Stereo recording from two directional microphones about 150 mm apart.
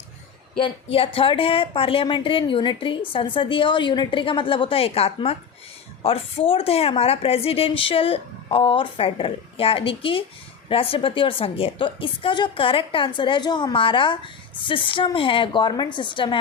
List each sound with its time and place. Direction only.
0.6 s speech: 40° left (ahead or behind)